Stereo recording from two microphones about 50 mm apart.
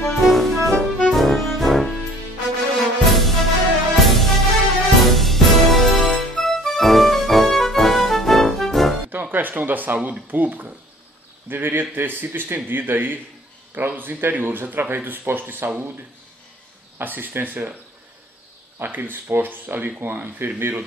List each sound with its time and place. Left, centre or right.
0.0 s music: centre
9.3 s speech: right
17.0 s speech: right
18.8 s speech: right